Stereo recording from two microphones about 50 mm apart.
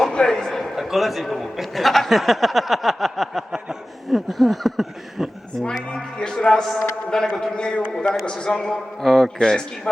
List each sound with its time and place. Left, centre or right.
0.1 s a sound: centre
0.6 s a man's voice: centre
5.6 s a man's voice: centre